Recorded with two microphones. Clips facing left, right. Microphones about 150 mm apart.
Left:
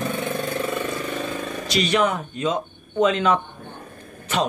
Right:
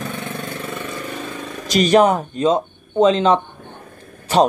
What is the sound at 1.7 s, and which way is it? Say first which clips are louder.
Speech: right 8 dB; 40° right (ahead or behind).